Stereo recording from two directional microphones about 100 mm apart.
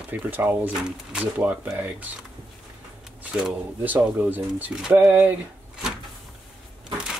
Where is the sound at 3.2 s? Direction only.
10° right (ahead or behind).